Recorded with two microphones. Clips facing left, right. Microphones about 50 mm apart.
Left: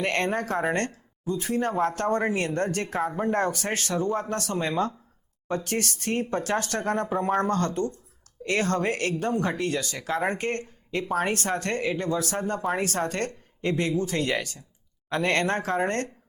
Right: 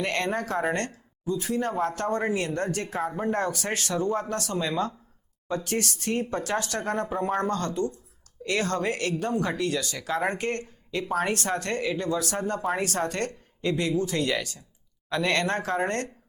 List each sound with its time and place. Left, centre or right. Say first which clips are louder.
0.0 s speech: left 2 dB; left
3.1 s speech: left 1 dB; centre
3.3 s speech: left 2 dB; left